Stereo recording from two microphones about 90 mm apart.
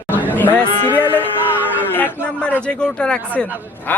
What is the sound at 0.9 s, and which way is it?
A man's voice, 20° left (ahead or behind).